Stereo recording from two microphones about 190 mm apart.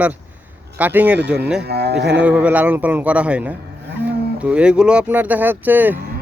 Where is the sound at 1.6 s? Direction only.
60° right (ahead or behind).